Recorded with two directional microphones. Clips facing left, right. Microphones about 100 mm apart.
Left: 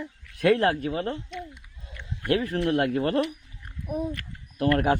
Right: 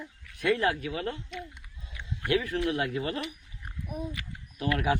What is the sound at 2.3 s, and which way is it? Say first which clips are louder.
Speech: left 4 dB; 40° left (ahead or behind).